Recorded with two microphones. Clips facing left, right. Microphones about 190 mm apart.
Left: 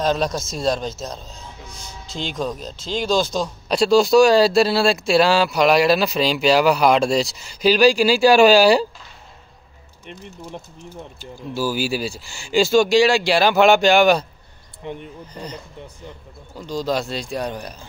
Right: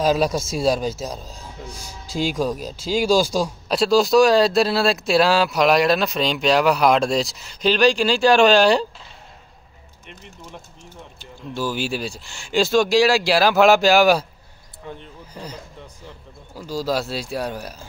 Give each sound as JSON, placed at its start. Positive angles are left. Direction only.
{"t": 0.0, "sound": "speech", "side_deg": -5}
{"t": 11.1, "sound": "speech", "side_deg": 5}
{"t": 14.8, "sound": "speech", "side_deg": 20}
{"t": 15.3, "sound": "speech", "side_deg": -5}